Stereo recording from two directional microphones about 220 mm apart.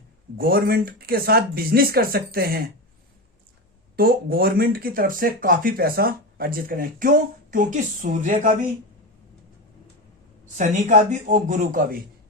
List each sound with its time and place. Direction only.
0.3 s speech: 40° right (ahead or behind)
3.9 s speech: 40° right (ahead or behind)
10.6 s speech: 35° right (ahead or behind)